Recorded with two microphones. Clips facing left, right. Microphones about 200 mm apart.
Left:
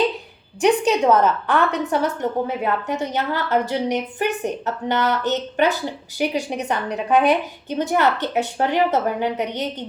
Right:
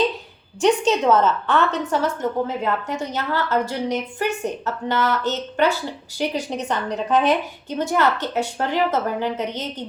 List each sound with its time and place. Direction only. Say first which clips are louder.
0.6 s a woman's voice: left 1 dB; 10° left (ahead or behind)